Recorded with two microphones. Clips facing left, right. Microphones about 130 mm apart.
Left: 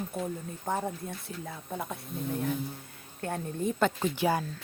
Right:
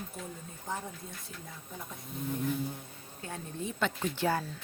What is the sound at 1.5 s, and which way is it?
Speech, 65° left (ahead or behind).